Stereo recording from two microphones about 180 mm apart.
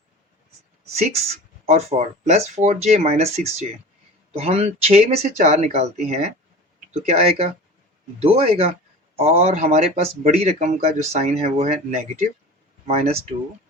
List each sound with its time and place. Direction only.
0.9 s speech: 40° right (ahead or behind)
4.4 s speech: 35° right (ahead or behind)